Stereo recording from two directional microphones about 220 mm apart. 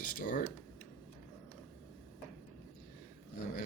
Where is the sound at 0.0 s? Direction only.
40° left (ahead or behind).